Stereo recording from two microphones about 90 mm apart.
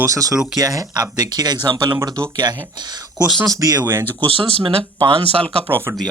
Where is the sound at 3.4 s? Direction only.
40° right (ahead or behind).